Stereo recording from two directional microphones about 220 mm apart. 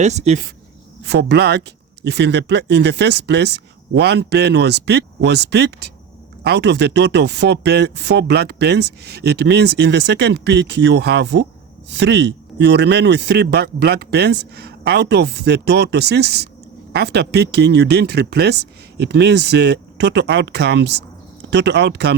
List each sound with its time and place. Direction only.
0.0 s speech: 30° right (ahead or behind)
1.0 s speech: 50° right (ahead or behind)